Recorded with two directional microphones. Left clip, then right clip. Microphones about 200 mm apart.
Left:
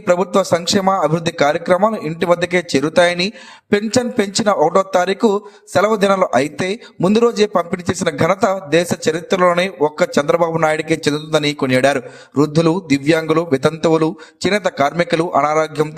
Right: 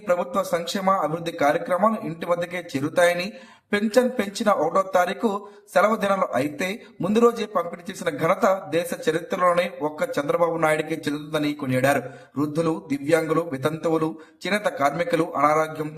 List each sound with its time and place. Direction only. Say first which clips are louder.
0.0 s speech: left 8 dB; 45° left (ahead or behind)